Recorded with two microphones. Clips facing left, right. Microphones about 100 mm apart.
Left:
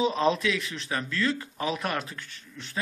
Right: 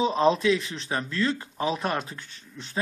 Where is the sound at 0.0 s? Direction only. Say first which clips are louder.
Right 3 dB; 25° right (ahead or behind).